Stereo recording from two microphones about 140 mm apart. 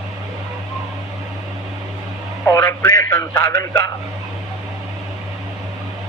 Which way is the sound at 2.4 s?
20° left (ahead or behind).